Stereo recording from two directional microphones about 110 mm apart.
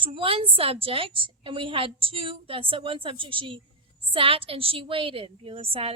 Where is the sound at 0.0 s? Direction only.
50° right (ahead or behind).